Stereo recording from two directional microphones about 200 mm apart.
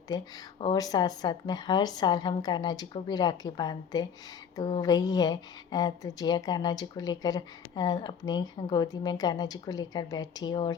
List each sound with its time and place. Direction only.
0.1 s speech: 20° left (ahead or behind)